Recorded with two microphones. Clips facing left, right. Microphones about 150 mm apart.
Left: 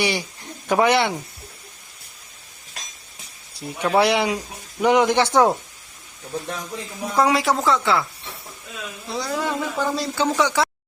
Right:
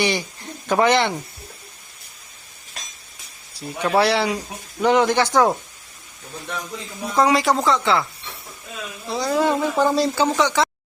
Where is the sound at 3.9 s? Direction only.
15° left (ahead or behind).